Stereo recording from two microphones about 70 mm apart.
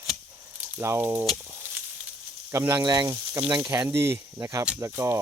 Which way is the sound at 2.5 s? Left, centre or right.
Right.